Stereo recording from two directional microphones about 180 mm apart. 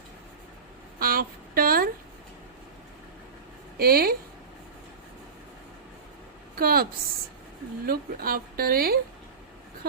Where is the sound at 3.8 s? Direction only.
55° right (ahead or behind).